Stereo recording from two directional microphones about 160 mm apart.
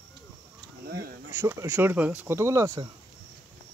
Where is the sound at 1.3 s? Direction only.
15° right (ahead or behind).